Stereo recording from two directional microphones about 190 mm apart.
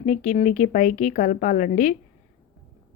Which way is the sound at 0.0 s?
40° left (ahead or behind).